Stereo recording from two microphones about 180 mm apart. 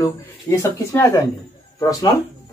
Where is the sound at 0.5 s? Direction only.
15° left (ahead or behind).